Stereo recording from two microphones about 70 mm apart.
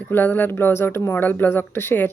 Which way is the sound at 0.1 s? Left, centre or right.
Left.